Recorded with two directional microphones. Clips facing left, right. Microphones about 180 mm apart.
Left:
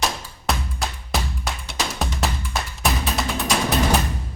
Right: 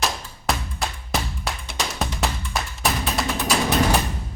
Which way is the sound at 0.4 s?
Centre (ahead or behind).